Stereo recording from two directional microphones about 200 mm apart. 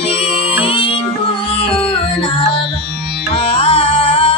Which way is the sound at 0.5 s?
30° left (ahead or behind).